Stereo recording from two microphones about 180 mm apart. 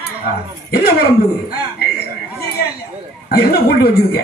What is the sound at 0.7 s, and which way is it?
Speech, 60° left (ahead or behind).